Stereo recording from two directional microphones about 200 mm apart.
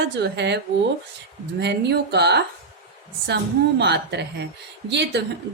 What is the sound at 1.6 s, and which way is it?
Speech, 55° right (ahead or behind).